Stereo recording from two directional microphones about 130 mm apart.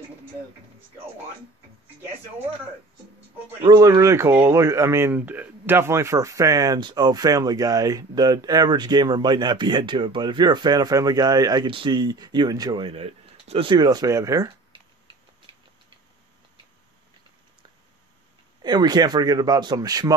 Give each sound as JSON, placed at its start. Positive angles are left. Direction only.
{"t": 3.6, "sound": "speech", "side_deg": -35}
{"t": 13.7, "sound": "speech", "side_deg": -30}
{"t": 15.5, "sound": "a sound", "side_deg": -40}
{"t": 18.6, "sound": "speech", "side_deg": -30}